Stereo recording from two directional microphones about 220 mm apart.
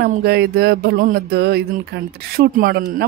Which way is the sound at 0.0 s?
45° right (ahead or behind).